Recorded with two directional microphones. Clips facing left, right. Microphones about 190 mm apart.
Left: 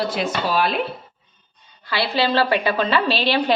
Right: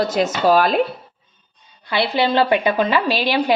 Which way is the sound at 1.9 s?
20° right (ahead or behind).